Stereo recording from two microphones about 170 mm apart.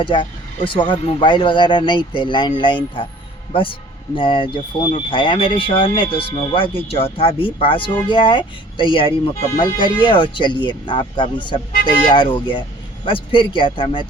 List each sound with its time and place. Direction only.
0.0 s speech: 30° left (ahead or behind)